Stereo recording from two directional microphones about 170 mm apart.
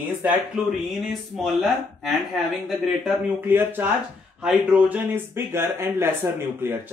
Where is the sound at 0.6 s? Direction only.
5° right (ahead or behind).